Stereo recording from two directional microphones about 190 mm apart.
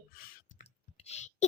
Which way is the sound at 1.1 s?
35° left (ahead or behind).